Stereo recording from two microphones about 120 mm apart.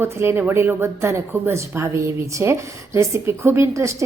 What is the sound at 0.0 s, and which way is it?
A woman's voice, 20° right (ahead or behind).